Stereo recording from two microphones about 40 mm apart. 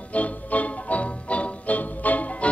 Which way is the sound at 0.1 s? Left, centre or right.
Left.